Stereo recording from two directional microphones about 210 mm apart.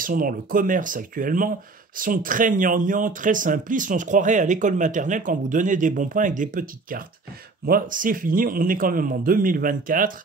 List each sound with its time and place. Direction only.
0.0 s speech: 45° right (ahead or behind)